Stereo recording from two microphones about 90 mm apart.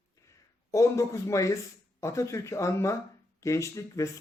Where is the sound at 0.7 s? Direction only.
35° left (ahead or behind).